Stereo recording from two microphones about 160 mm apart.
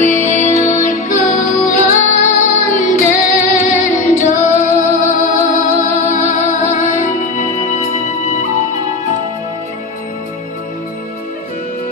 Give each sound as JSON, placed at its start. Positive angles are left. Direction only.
{"t": 0.0, "sound": "music", "side_deg": 55}